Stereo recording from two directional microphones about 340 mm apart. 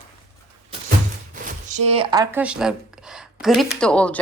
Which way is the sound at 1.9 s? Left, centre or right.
Centre.